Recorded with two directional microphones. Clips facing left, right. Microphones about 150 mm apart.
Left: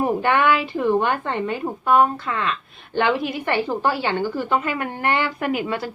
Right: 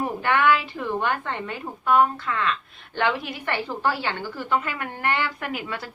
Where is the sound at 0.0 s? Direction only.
25° left (ahead or behind).